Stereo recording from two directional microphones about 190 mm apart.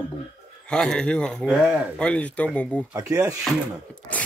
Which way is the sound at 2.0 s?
5° left (ahead or behind).